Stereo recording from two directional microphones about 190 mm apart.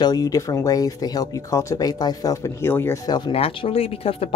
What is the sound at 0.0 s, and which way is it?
Speech, 20° left (ahead or behind).